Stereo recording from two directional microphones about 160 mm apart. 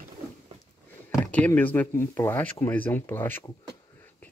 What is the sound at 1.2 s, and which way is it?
Speech, 10° left (ahead or behind).